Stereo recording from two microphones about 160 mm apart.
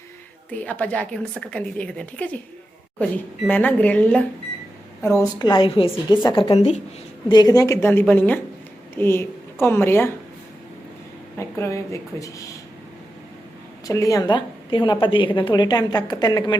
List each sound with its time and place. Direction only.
0.6 s a woman's voice: 10° left (ahead or behind)
3.5 s a woman's voice: 10° left (ahead or behind)
5.0 s a woman's voice: 20° left (ahead or behind); by 6.8 s 45° left (ahead or behind)
7.3 s a woman's voice: 25° left (ahead or behind)
11.3 s a woman's voice: 15° left (ahead or behind)
13.8 s a woman's voice: 20° left (ahead or behind)